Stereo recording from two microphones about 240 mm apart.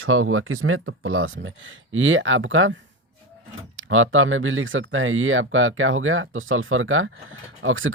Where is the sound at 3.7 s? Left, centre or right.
Right.